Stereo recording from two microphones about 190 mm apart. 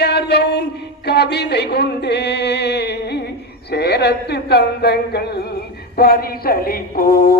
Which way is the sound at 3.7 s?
60° left (ahead or behind).